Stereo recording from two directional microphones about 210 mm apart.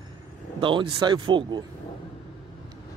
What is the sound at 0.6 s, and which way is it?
Speech, 25° right (ahead or behind).